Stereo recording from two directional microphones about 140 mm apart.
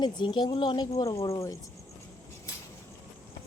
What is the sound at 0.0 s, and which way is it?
Speech, 35° left (ahead or behind).